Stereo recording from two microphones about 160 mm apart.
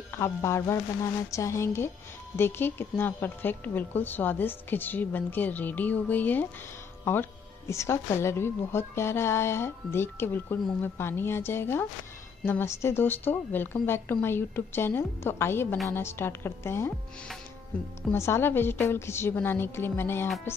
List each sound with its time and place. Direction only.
0.2 s speech: 15° left (ahead or behind)